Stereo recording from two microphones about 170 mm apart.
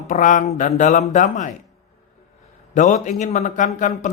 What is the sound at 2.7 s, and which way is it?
Speech, 50° left (ahead or behind).